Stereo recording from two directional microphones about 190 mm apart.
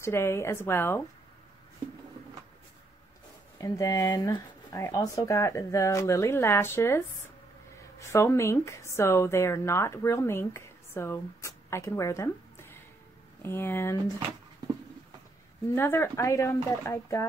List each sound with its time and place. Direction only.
0.0 s speech: 15° left (ahead or behind)
3.5 s speech: 15° left (ahead or behind)
8.0 s speech: 15° left (ahead or behind)
15.7 s speech: 10° left (ahead or behind)